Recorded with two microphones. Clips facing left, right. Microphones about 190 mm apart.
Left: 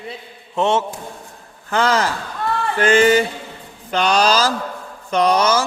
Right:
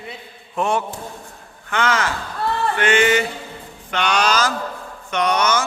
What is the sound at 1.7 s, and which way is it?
Speech, 35° left (ahead or behind).